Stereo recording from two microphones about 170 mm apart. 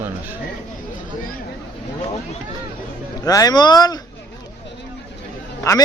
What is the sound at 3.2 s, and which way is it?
Speech, 20° left (ahead or behind).